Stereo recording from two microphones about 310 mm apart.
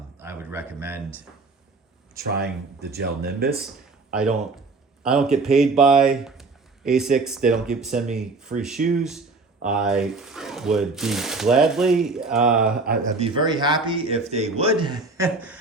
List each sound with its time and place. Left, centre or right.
0.2 s a sound: centre
2.1 s speech: right
4.1 s speech: centre
12.8 s speech: right
13.2 s speech: centre